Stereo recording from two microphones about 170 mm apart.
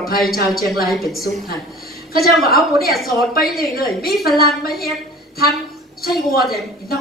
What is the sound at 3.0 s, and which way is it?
Speech, 60° left (ahead or behind).